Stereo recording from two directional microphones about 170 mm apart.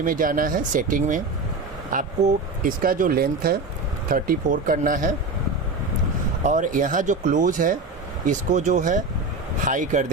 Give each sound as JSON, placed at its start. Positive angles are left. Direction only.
{"t": 0.0, "sound": "speech", "side_deg": -55}
{"t": 6.4, "sound": "speech", "side_deg": -50}